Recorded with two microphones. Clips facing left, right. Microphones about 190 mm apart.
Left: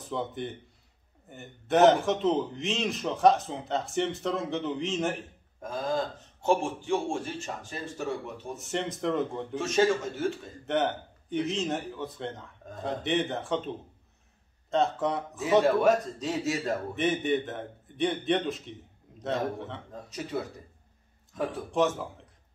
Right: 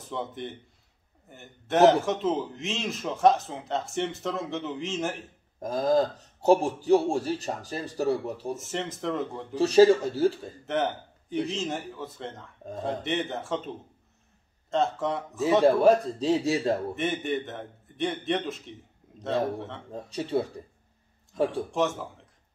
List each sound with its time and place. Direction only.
0.0 s a man's voice: centre (ahead or behind)
5.6 s a man's voice: 35° right (ahead or behind)
8.5 s a man's voice: centre (ahead or behind)
9.6 s a man's voice: 35° right (ahead or behind)
10.7 s a man's voice: centre (ahead or behind)
15.6 s a man's voice: 30° right (ahead or behind)
16.9 s a man's voice: centre (ahead or behind)
19.9 s a man's voice: 30° right (ahead or behind)
21.6 s a man's voice: centre (ahead or behind)